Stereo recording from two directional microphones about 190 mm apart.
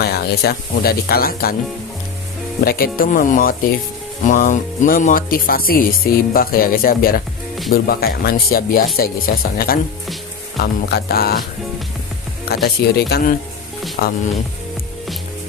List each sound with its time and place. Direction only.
0.0 s speech: 55° left (ahead or behind)
2.6 s speech: 50° left (ahead or behind)
12.6 s speech: 55° left (ahead or behind)